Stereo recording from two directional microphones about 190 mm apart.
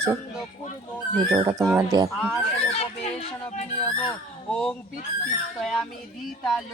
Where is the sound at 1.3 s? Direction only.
20° right (ahead or behind).